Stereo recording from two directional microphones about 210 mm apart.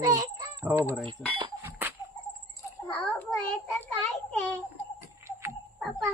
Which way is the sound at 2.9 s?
10° left (ahead or behind).